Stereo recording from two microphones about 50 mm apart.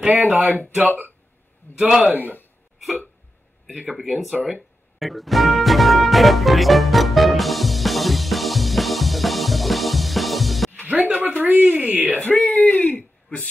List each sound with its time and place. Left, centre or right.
0.0 s speech: right
1.8 s a man's voice: centre
2.0 s speech: right
3.9 s speech: centre
4.9 s music: centre
10.9 s a sound: right
12.2 s speech: left
12.7 s a sound: left